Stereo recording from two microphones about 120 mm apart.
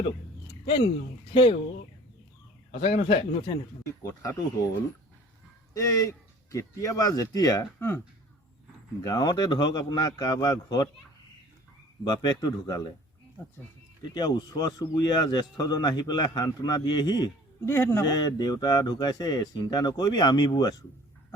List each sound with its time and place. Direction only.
1.3 s a man's voice: 45° left (ahead or behind)
2.8 s a man's voice: 55° left (ahead or behind)
4.0 s speech: 30° left (ahead or behind)
5.7 s speech: 25° left (ahead or behind)
7.8 s speech: 20° left (ahead or behind)
9.0 s a man's voice: 35° left (ahead or behind)
12.0 s a man's voice: 35° left (ahead or behind)
14.1 s a man's voice: 35° left (ahead or behind)
17.7 s speech: 20° left (ahead or behind)
18.0 s a man's voice: 35° left (ahead or behind)